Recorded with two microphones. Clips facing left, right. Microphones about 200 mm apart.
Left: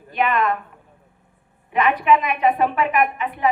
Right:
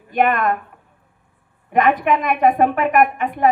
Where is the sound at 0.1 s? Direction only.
50° right (ahead or behind).